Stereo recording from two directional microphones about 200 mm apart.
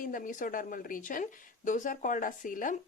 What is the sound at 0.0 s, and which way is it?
Speech, 40° left (ahead or behind).